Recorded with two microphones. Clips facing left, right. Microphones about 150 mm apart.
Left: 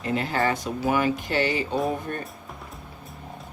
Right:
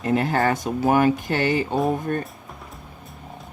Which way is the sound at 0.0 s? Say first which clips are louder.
Right 4 dB; 50° right (ahead or behind).